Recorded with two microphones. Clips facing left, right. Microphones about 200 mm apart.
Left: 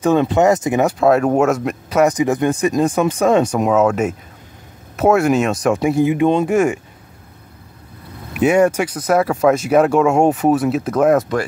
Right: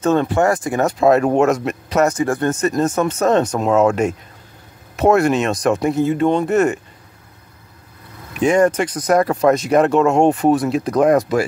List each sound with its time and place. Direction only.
0.0 s speech: 15° left (ahead or behind)
0.8 s speech: 5° left (ahead or behind)
2.0 s speech: 15° left (ahead or behind)
8.3 s speech: 5° left (ahead or behind)